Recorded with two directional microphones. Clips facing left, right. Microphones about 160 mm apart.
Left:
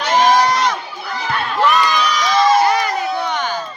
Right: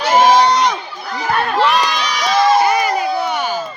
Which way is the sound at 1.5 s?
75° right (ahead or behind).